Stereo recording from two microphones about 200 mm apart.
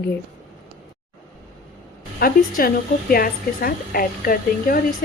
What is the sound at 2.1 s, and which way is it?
A woman's voice, 45° left (ahead or behind).